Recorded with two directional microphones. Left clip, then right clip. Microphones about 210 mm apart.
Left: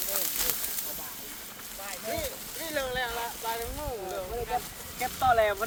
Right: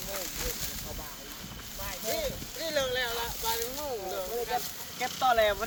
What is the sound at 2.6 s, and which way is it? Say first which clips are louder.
Speech: right 1 dB; 40° right (ahead or behind).